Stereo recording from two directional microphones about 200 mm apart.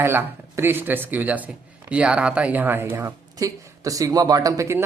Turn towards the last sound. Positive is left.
turn(degrees=-15)  # may be behind; listen again after turning